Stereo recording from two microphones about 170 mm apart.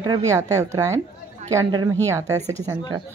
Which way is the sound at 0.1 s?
20° right (ahead or behind).